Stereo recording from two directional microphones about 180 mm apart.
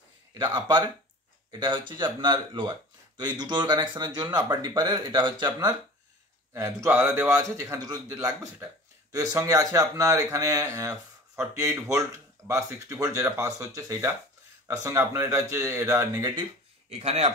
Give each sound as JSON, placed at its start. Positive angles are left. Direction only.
{"t": 0.3, "sound": "a sound", "side_deg": -25}
{"t": 1.5, "sound": "speech", "side_deg": -25}
{"t": 16.9, "sound": "speech", "side_deg": -35}